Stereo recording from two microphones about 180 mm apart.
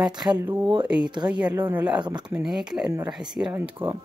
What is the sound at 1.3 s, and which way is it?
Speech, 10° right (ahead or behind).